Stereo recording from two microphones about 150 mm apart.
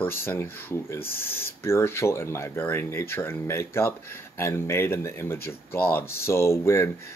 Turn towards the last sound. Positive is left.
turn(degrees=20)  # may be behind; listen again after turning